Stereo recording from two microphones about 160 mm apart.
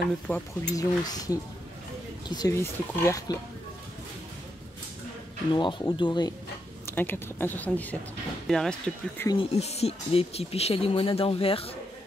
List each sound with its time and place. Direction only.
0.3 s speech: 20° left (ahead or behind)
5.5 s speech: 30° left (ahead or behind)
6.9 s speech: 15° left (ahead or behind)
9.6 s speech: 40° left (ahead or behind)